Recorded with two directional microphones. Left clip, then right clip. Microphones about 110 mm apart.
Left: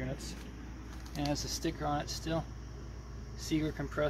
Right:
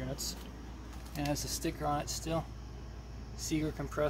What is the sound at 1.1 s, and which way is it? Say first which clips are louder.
Speech: even; 10° right (ahead or behind).